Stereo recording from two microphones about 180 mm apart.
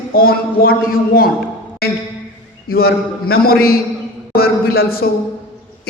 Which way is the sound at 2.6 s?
60° left (ahead or behind).